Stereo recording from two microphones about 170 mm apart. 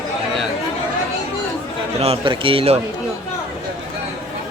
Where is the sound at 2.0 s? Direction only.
35° right (ahead or behind).